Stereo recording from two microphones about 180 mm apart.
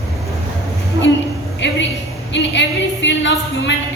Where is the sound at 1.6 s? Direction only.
85° left.